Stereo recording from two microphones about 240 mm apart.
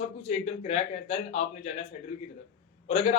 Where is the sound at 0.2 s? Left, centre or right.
Left.